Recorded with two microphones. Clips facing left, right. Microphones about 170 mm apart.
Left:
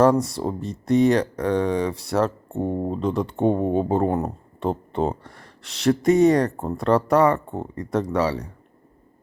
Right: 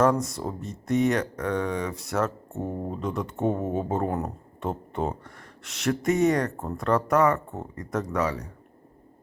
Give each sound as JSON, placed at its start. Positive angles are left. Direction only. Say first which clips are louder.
{"t": 0.0, "sound": "speech", "louder": "left 5 dB", "side_deg": 35}